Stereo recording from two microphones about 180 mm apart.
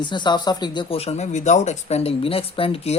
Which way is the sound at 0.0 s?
25° left (ahead or behind).